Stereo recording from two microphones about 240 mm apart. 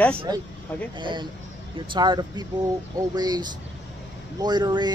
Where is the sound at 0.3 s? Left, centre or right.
Centre.